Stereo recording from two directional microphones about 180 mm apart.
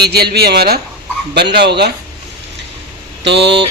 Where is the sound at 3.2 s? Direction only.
70° right (ahead or behind).